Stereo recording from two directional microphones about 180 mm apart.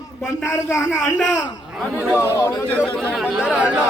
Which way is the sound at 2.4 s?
15° left (ahead or behind).